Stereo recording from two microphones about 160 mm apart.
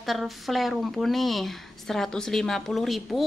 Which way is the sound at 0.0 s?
Centre (ahead or behind).